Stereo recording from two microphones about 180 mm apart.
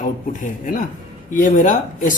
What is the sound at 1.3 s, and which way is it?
Speech, 45° left (ahead or behind).